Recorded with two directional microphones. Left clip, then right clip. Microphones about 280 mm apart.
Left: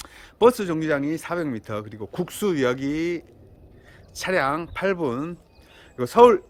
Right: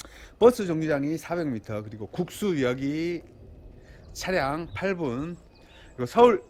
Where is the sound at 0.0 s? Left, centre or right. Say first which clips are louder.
Left 2 dB; centre.